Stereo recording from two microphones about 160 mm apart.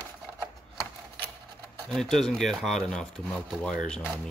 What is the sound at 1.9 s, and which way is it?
Speech, centre (ahead or behind).